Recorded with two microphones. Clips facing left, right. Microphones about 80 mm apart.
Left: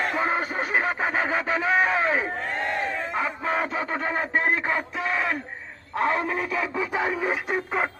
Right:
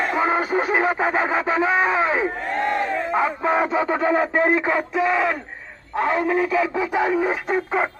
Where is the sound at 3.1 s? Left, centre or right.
Right.